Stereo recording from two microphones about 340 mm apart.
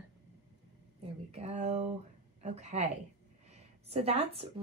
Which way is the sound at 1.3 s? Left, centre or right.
Centre.